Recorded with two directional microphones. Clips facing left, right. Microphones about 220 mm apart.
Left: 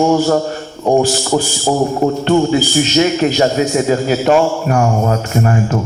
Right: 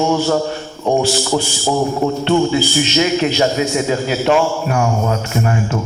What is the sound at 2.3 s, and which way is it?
A man's voice, 45° left (ahead or behind).